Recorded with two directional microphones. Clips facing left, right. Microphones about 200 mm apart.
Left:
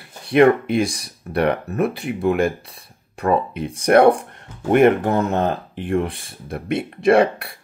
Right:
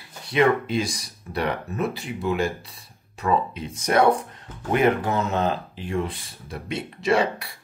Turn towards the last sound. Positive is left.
turn(degrees=55)  # may be behind; listen again after turning